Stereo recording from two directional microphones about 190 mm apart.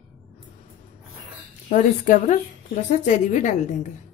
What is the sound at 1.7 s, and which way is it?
A woman's voice, 45° left (ahead or behind).